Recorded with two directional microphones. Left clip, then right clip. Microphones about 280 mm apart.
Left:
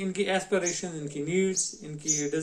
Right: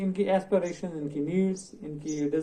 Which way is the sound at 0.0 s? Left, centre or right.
Left.